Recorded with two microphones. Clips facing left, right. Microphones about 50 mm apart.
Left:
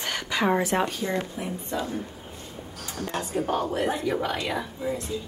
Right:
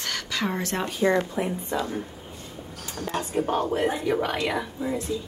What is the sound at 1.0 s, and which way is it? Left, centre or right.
Speech, right.